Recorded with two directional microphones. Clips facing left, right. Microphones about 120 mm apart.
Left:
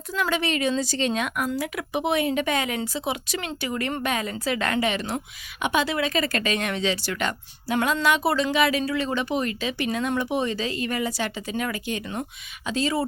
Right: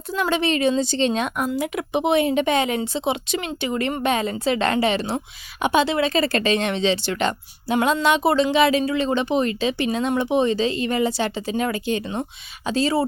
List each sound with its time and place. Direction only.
0.1 s a woman's voice: 25° right (ahead or behind)